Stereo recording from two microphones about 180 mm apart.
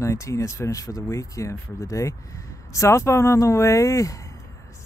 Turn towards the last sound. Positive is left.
turn(degrees=15)  # may be behind; listen again after turning